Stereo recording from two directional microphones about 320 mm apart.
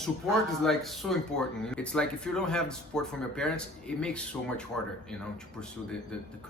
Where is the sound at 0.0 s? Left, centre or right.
Centre.